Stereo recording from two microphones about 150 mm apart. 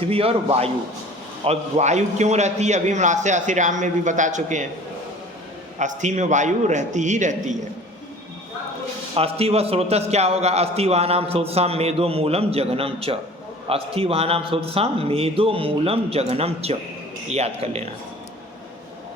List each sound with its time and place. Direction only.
0.0 s a man's voice: 40° right (ahead or behind)
5.8 s a man's voice: 55° right (ahead or behind)
9.1 s a man's voice: 40° right (ahead or behind)